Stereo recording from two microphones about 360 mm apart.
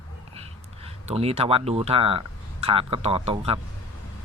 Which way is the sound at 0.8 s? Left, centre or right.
Centre.